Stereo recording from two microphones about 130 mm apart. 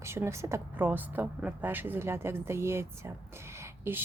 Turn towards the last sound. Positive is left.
turn(degrees=-20)  # may be behind; listen again after turning